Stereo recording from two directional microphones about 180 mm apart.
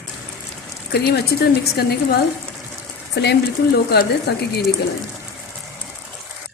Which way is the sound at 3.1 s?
65° left (ahead or behind).